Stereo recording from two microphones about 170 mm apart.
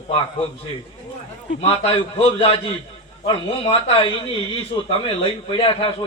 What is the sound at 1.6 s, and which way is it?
A man's voice, 35° left (ahead or behind).